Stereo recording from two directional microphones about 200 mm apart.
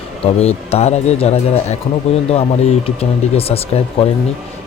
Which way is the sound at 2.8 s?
30° left (ahead or behind).